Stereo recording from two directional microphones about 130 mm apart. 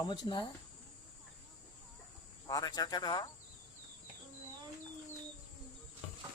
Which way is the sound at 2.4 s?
30° left (ahead or behind).